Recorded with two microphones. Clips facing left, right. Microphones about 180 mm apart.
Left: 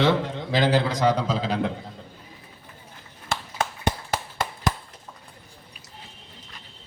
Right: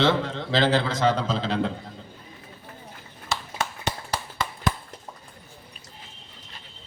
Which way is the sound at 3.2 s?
50° left (ahead or behind).